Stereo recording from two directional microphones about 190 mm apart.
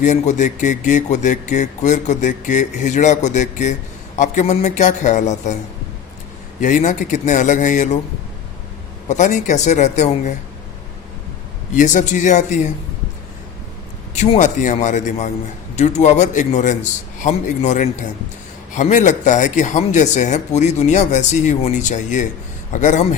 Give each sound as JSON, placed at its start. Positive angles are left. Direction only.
{"t": 0.0, "sound": "speech", "side_deg": 40}
{"t": 6.6, "sound": "speech", "side_deg": 40}
{"t": 9.0, "sound": "speech", "side_deg": 40}
{"t": 11.7, "sound": "speech", "side_deg": 40}
{"t": 14.2, "sound": "speech", "side_deg": 40}